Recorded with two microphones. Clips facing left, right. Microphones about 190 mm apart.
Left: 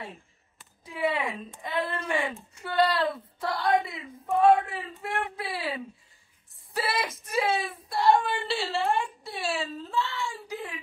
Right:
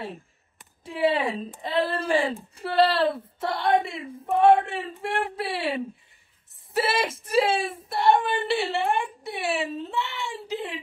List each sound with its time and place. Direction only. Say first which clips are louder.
0.6 s speech: right 5 dB; 30° right (ahead or behind)
1.6 s a sound: right 5 dB; 30° right (ahead or behind)
2.5 s speech: right 3 dB; 30° right (ahead or behind)